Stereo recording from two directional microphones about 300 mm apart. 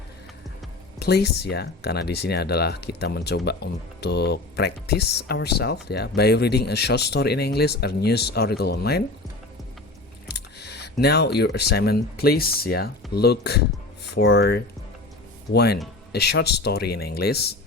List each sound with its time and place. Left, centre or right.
0.9 s speech: left
10.2 s a sound: left
11.0 s speech: left